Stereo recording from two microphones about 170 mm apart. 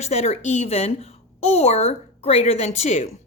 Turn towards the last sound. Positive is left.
turn(degrees=40)  # may be behind; listen again after turning